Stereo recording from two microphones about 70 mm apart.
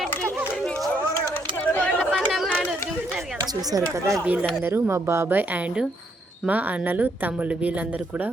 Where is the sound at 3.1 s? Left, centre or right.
Centre.